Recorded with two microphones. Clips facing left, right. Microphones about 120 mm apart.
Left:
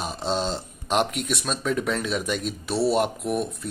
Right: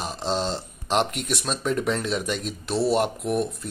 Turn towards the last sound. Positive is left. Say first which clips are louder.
# even
turn(degrees=0)  # may be behind; listen again after turning